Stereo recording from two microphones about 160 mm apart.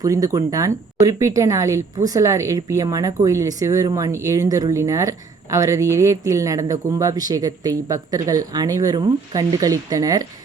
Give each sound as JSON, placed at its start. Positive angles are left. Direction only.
{"t": 0.0, "sound": "speech", "side_deg": -20}